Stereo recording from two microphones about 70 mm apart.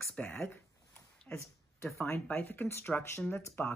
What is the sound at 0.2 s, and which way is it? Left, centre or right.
Speech, left.